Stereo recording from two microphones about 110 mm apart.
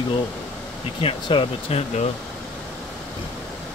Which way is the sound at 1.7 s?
70° left (ahead or behind).